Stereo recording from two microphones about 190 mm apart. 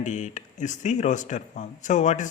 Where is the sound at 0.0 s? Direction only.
40° left (ahead or behind).